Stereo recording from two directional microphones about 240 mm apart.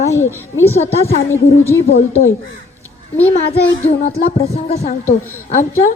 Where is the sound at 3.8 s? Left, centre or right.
Left.